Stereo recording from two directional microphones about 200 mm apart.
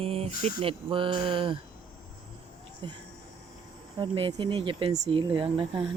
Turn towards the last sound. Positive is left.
turn(degrees=-25)  # may be behind; listen again after turning